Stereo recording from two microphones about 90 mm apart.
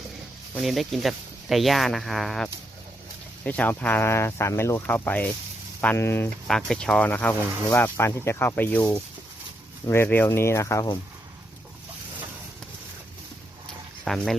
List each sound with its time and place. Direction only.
0.6 s speech: centre (ahead or behind)
3.4 s speech: 15° left (ahead or behind); by 4.8 s 30° left (ahead or behind)
4.9 s speech: 20° left (ahead or behind)
6.0 s speech: 30° left (ahead or behind)
6.5 s speech: 10° left (ahead or behind)
9.9 s speech: 25° left (ahead or behind)
14.0 s speech: 5° left (ahead or behind)